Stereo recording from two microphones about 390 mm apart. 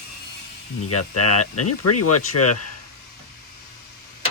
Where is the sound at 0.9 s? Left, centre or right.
Left.